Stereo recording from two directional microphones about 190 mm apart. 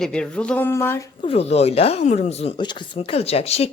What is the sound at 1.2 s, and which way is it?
Speech, 30° left (ahead or behind).